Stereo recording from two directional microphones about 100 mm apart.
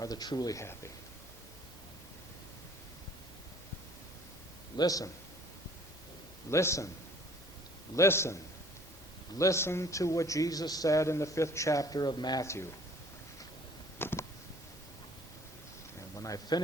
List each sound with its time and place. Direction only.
0.0 s a man's voice: 40° left (ahead or behind)
4.8 s a man's voice: 35° left (ahead or behind)
6.5 s a man's voice: 30° left (ahead or behind)
7.9 s a man's voice: 25° left (ahead or behind)
9.4 s a man's voice: 30° left (ahead or behind)
14.0 s a sound: 25° left (ahead or behind)
16.0 s speech: 35° left (ahead or behind)